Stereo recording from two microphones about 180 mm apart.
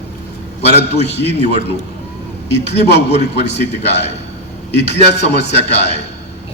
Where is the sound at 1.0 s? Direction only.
70° left (ahead or behind).